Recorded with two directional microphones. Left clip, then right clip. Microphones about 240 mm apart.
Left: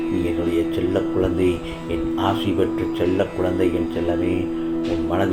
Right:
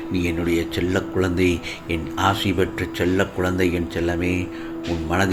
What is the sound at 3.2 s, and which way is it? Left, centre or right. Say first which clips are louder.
Speech: left 1 dB; right.